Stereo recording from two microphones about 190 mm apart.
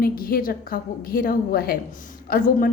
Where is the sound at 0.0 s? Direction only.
50° left (ahead or behind).